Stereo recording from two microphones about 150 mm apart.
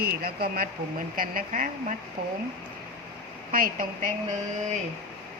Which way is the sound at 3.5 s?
70° right (ahead or behind).